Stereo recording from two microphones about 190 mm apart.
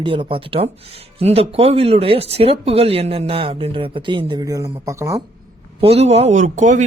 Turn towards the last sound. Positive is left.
turn(degrees=-40)  # may be behind; listen again after turning